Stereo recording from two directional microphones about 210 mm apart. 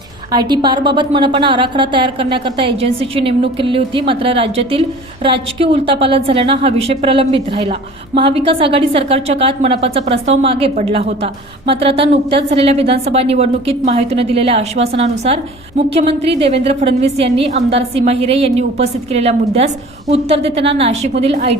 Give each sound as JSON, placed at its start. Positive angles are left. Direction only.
{"t": 0.3, "sound": "a woman's voice", "side_deg": -20}